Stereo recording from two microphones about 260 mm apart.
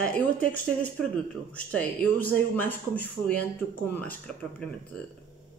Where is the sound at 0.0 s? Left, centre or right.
Centre.